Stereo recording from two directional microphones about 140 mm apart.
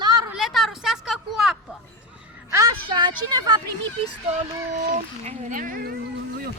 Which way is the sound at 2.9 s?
30° right (ahead or behind).